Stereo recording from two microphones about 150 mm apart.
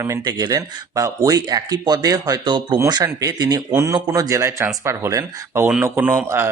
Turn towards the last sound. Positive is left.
turn(degrees=-15)  # may be behind; listen again after turning